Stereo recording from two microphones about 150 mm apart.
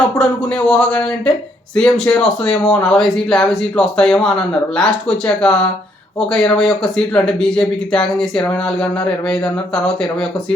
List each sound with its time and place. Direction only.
0.2 s speech: 5° left (ahead or behind)